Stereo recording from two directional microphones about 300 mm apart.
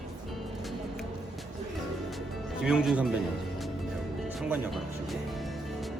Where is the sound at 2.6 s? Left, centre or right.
Centre.